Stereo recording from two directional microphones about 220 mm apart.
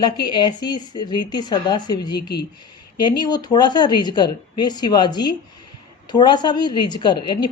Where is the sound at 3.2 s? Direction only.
20° left (ahead or behind).